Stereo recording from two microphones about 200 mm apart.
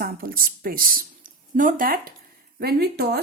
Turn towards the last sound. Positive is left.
turn(degrees=-55)  # may be behind; listen again after turning